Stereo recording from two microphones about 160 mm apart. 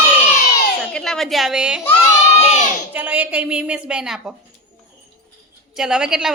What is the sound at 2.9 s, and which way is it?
A woman's voice, 10° right (ahead or behind).